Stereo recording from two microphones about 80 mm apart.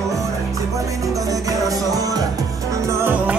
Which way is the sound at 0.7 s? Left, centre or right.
Right.